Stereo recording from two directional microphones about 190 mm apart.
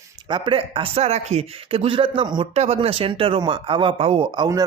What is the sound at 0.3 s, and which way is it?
Speech, 25° right (ahead or behind).